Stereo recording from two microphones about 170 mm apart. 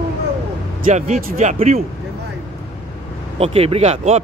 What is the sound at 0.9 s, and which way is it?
Speech, 45° right (ahead or behind).